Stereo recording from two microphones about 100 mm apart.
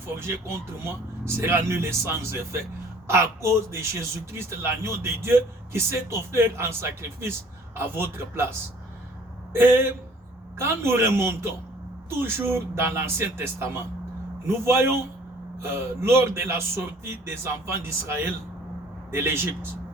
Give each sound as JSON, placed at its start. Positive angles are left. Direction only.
{"t": 0.2, "sound": "a man's voice", "side_deg": -25}
{"t": 3.1, "sound": "a man's voice", "side_deg": -25}